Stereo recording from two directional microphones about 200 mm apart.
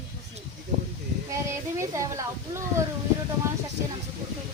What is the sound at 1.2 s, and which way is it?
Speech, 15° right (ahead or behind).